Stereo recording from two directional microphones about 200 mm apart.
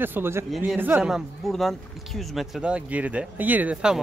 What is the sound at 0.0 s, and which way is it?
A man's voice, 10° right (ahead or behind).